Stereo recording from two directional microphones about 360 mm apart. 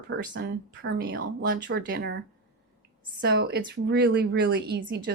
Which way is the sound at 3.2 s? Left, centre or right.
Right.